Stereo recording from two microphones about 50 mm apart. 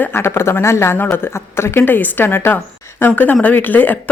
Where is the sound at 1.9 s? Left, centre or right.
Left.